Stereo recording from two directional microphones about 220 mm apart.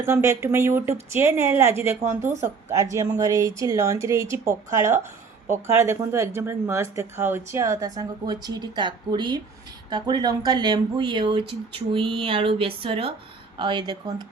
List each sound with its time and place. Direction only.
0.0 s speech: 15° right (ahead or behind)